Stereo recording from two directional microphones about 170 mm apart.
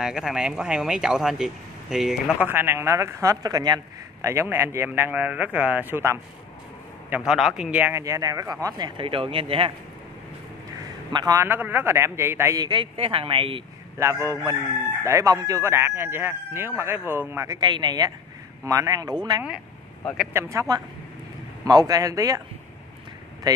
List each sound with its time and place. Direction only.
0.0 s a man's voice: 5° right (ahead or behind); by 9.7 s 30° right (ahead or behind)
11.1 s a man's voice: 25° right (ahead or behind)
13.9 s a man's voice: 15° right (ahead or behind)
23.5 s a sound: 20° right (ahead or behind)